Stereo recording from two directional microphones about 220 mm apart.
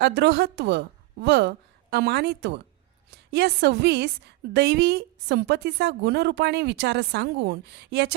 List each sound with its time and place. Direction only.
0.0 s a woman's voice: 50° right (ahead or behind)